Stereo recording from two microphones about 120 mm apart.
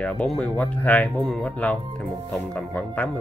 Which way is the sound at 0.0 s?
10° left (ahead or behind).